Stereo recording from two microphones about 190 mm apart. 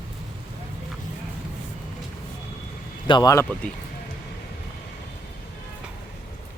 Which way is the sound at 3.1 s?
20° left (ahead or behind).